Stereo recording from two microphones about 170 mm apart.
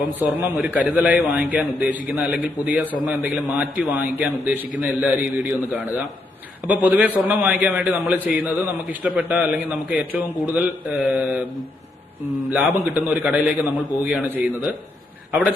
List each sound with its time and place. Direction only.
0.2 s a man's voice: 10° right (ahead or behind)